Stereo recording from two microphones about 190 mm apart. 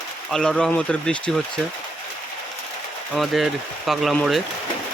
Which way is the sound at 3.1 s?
Centre (ahead or behind).